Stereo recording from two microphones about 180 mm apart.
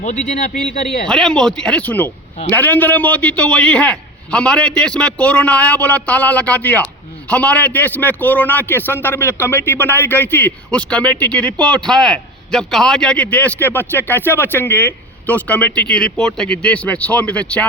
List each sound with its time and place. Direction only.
0.0 s speech: 40° left (ahead or behind)
1.0 s a man's voice: 5° left (ahead or behind)